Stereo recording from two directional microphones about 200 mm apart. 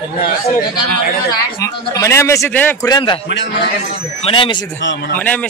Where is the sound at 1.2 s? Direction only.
15° left (ahead or behind).